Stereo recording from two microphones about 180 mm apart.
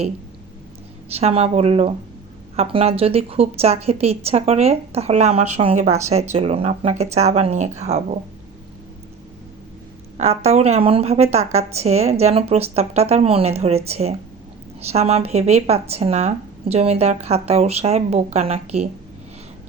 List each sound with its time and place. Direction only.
1.1 s speech: 35° right (ahead or behind)
10.2 s speech: 35° right (ahead or behind)